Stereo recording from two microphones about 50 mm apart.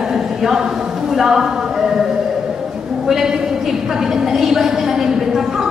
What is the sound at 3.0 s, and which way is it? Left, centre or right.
A woman's voice, centre.